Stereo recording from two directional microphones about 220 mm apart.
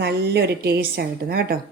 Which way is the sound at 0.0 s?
50° right (ahead or behind).